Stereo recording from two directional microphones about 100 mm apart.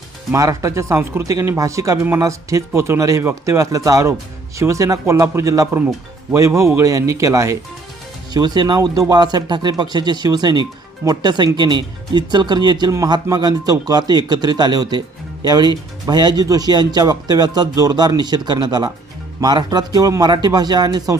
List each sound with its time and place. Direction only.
0.3 s speech: 35° right (ahead or behind)
8.3 s speech: 45° right (ahead or behind)